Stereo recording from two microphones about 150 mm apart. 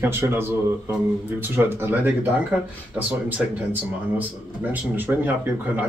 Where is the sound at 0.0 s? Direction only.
15° right (ahead or behind).